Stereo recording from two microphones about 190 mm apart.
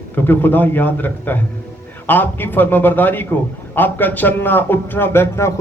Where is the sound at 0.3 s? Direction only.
10° left (ahead or behind).